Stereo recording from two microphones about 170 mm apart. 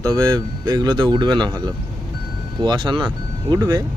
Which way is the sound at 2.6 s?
25° right (ahead or behind).